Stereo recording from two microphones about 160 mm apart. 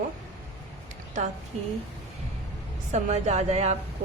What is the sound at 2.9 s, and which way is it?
Speech, 45° right (ahead or behind).